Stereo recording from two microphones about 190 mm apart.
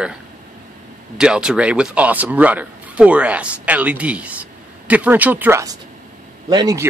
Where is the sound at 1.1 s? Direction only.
5° right (ahead or behind).